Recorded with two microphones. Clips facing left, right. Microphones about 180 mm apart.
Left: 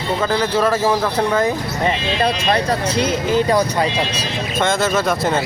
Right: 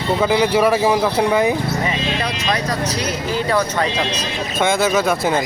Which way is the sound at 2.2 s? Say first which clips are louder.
Left 4 dB; 30° left (ahead or behind).